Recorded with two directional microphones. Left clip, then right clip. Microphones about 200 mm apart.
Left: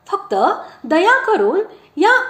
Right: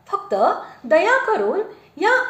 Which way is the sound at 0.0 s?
30° left (ahead or behind).